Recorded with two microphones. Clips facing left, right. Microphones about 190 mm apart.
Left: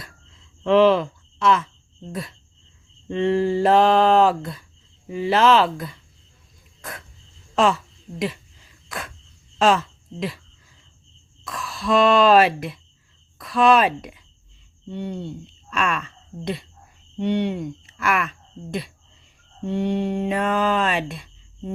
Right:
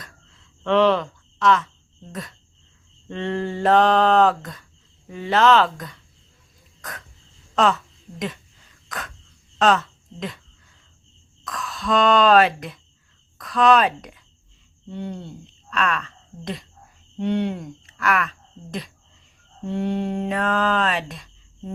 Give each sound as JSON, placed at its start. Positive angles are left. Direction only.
{"t": 0.6, "sound": "speech", "side_deg": 5}
{"t": 3.1, "sound": "speech", "side_deg": 10}
{"t": 7.5, "sound": "speech", "side_deg": 10}
{"t": 9.6, "sound": "speech", "side_deg": 10}
{"t": 11.4, "sound": "speech", "side_deg": 5}
{"t": 15.7, "sound": "speech", "side_deg": 10}
{"t": 17.9, "sound": "speech", "side_deg": 10}
{"t": 19.6, "sound": "speech", "side_deg": 0}